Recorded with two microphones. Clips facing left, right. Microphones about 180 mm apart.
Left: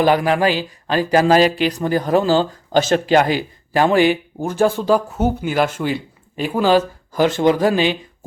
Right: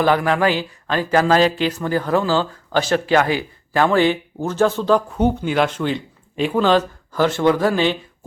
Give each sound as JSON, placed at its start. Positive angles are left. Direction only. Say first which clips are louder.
{"t": 0.0, "sound": "speech", "louder": "left 2 dB", "side_deg": 15}